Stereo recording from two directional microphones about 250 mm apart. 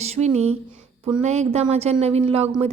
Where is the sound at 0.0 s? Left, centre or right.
Right.